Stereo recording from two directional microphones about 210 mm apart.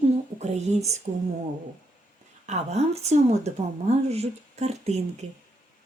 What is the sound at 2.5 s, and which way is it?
A woman's voice, 30° right (ahead or behind).